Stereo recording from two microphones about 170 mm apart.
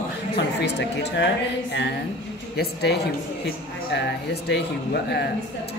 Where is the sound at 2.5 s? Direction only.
70° left (ahead or behind).